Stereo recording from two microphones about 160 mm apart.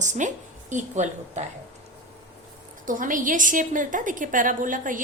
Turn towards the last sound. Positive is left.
turn(degrees=-55)  # may be behind; listen again after turning